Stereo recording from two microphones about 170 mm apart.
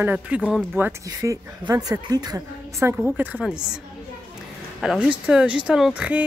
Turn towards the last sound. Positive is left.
turn(degrees=-10)  # may be behind; listen again after turning